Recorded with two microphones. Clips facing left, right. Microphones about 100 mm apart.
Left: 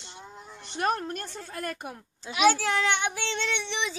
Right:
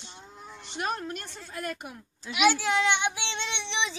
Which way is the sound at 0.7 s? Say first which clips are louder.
Left 4 dB; 50° left (ahead or behind).